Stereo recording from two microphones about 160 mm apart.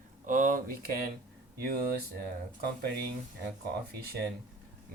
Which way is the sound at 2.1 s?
75° right (ahead or behind).